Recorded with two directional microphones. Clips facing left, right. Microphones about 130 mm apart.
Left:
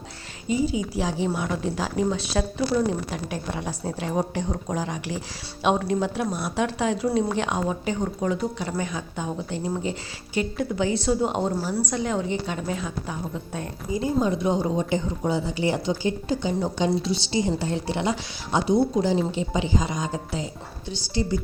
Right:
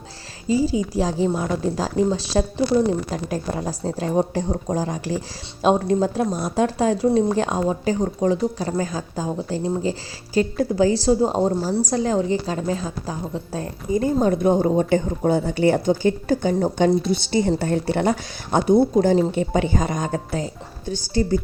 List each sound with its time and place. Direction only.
0.4 s speech: 35° right (ahead or behind)
13.9 s a woman's voice: 50° right (ahead or behind)